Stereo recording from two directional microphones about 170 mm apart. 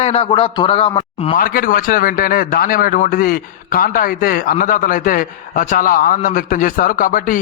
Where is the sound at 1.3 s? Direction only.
55° left (ahead or behind).